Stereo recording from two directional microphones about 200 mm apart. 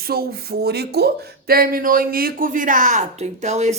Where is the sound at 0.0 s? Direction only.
50° right (ahead or behind).